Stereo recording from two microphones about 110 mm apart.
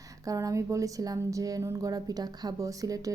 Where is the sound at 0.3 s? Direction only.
30° right (ahead or behind).